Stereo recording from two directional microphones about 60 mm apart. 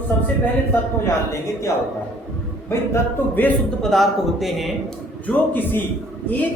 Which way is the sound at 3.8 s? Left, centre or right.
Centre.